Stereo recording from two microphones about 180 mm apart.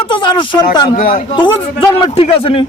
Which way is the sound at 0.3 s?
25° left (ahead or behind).